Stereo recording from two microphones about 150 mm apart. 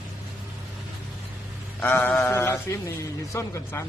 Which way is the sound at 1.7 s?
15° left (ahead or behind).